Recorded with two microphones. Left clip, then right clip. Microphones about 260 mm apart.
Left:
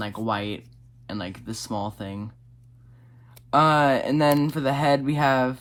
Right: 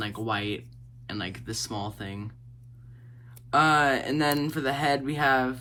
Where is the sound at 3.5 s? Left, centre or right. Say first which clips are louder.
Left 3 dB; left.